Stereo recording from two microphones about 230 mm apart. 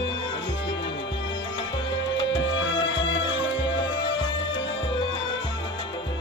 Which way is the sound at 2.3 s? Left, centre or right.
Left.